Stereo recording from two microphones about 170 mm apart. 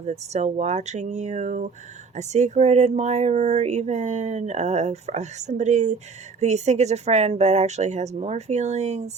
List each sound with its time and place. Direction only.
0.0 s speech: 40° right (ahead or behind)